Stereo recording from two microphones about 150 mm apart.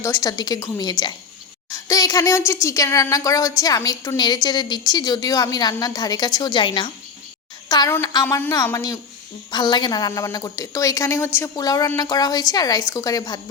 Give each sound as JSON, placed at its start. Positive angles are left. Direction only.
{"t": 0.0, "sound": "a woman's voice", "side_deg": 20}